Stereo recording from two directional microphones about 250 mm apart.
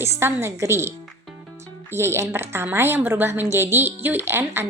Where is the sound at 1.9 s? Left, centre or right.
Centre.